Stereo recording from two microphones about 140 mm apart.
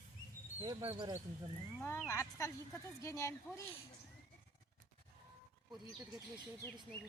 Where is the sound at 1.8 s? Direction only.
15° left (ahead or behind).